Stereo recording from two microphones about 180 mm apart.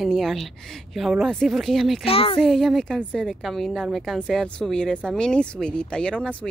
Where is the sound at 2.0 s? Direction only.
30° left (ahead or behind).